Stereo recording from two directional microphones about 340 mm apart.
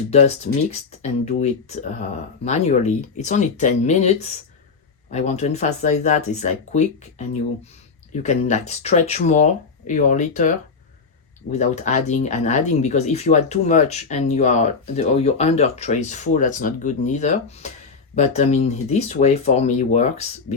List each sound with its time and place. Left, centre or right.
0.1 s speech: centre
11.5 s speech: centre